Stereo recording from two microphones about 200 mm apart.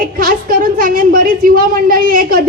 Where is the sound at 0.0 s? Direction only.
45° right (ahead or behind).